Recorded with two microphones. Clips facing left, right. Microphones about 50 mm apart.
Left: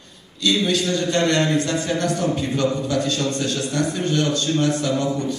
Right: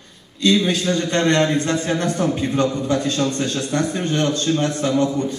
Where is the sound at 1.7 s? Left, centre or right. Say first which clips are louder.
Right 1 dB; right.